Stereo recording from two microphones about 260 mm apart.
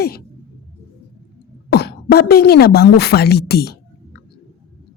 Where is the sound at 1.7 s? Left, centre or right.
Left.